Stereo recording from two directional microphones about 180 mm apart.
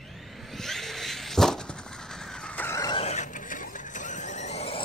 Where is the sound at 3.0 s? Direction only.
40° left (ahead or behind).